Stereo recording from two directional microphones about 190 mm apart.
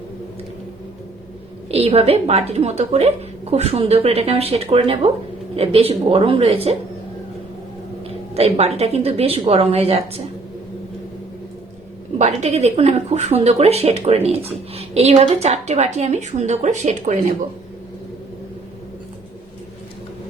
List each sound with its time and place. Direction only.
1.7 s a woman's voice: 30° right (ahead or behind)
8.4 s a woman's voice: 35° right (ahead or behind)
12.2 s a woman's voice: 35° right (ahead or behind)